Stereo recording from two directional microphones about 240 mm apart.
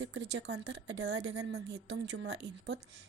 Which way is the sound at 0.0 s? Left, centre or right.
Right.